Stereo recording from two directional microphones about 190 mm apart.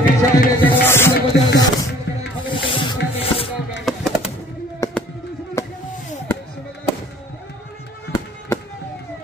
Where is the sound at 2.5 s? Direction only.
25° left (ahead or behind).